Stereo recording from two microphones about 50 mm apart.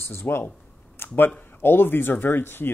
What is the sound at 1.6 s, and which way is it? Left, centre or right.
Speech, left.